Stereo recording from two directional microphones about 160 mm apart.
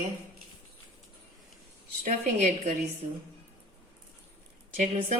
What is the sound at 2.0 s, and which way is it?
Speech, 50° right (ahead or behind).